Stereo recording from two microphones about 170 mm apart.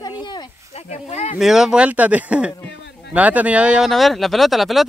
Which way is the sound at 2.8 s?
90° left.